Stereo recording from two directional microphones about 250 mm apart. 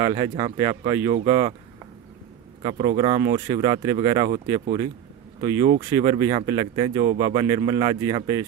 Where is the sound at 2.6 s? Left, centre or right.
Right.